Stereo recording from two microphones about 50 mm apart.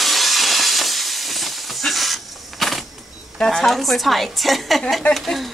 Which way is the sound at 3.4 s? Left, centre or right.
Centre.